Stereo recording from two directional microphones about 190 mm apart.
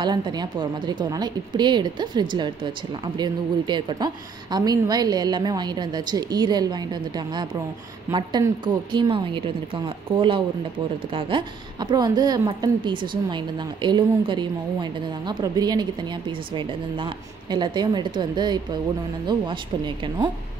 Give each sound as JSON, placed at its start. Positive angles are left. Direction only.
{"t": 0.0, "sound": "a woman's voice", "side_deg": -20}